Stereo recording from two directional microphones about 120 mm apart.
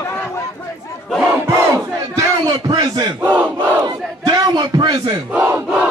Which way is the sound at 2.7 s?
40° right (ahead or behind).